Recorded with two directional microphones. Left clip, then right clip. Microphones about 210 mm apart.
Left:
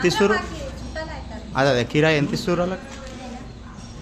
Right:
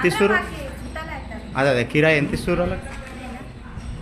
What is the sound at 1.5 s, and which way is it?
A man's voice, 10° left (ahead or behind).